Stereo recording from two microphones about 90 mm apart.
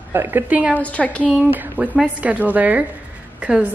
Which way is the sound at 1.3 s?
15° right (ahead or behind).